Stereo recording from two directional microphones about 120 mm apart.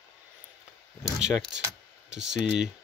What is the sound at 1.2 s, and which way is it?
Speech, 5° right (ahead or behind).